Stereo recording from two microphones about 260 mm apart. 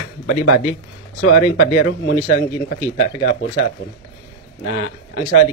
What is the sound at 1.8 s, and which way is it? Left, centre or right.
Speech, left.